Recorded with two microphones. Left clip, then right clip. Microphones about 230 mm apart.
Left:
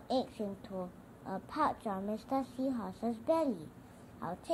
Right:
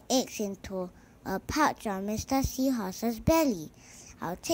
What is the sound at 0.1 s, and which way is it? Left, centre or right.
A child's voice, right.